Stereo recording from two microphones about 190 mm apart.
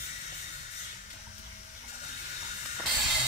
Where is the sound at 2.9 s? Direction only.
20° right (ahead or behind).